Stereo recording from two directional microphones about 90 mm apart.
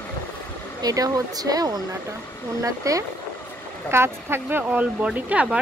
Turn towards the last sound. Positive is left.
turn(degrees=-15)  # may be behind; listen again after turning